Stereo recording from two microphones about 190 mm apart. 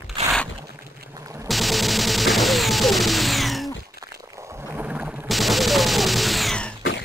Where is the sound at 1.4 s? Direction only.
Centre (ahead or behind).